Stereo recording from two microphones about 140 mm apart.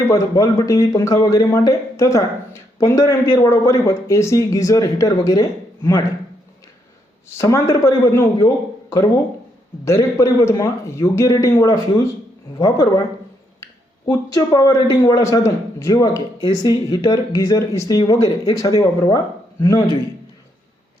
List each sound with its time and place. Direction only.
0.0 s a man's voice: 25° left (ahead or behind)
7.3 s a man's voice: 25° left (ahead or behind)